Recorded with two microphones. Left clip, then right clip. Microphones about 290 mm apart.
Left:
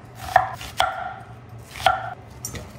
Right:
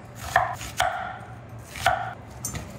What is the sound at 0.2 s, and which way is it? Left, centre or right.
Chopping, centre.